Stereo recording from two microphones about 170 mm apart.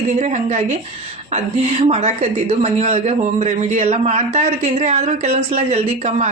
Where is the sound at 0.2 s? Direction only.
45° right (ahead or behind).